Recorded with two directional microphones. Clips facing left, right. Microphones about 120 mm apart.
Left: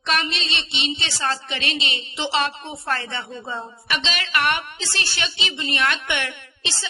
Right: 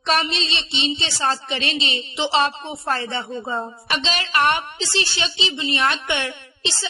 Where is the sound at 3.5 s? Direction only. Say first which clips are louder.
Right 1 dB; 40° right (ahead or behind).